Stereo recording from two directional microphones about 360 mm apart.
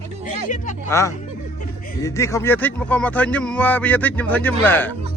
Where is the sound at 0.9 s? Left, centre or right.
Centre.